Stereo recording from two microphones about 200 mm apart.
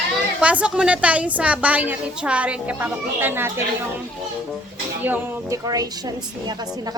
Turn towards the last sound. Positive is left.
turn(degrees=-20)  # may be behind; listen again after turning